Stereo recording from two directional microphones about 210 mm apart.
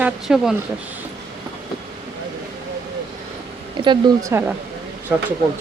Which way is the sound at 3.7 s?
20° right (ahead or behind).